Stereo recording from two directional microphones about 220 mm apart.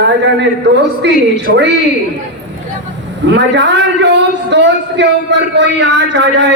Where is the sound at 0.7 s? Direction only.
55° right (ahead or behind).